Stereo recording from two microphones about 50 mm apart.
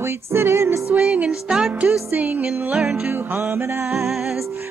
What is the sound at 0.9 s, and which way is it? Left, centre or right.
Music, right.